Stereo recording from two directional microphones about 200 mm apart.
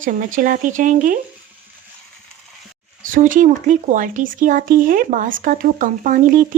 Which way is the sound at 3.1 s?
40° right (ahead or behind).